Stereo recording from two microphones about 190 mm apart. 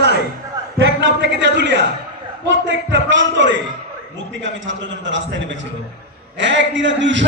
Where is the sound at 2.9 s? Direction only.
70° right (ahead or behind).